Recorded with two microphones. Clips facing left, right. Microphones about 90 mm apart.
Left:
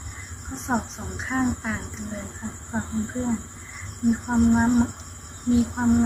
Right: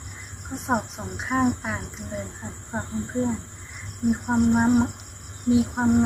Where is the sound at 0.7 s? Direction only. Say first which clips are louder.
Right 1 dB; 10° right (ahead or behind).